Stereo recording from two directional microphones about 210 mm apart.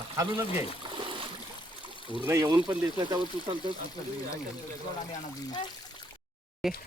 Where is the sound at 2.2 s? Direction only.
15° right (ahead or behind).